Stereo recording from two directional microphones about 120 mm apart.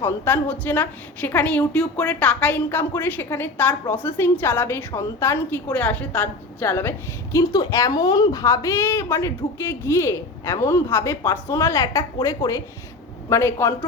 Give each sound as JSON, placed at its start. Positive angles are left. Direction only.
{"t": 0.0, "sound": "a woman's voice", "side_deg": 15}
{"t": 6.6, "sound": "a woman's voice", "side_deg": 25}